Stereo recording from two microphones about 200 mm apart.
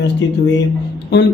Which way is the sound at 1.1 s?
60° left (ahead or behind).